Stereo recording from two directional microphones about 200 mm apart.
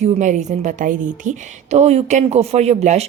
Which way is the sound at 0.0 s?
35° right (ahead or behind).